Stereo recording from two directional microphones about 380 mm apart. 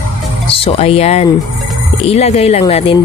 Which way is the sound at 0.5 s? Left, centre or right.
Centre.